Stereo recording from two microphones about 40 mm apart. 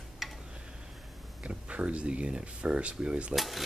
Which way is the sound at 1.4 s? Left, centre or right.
Right.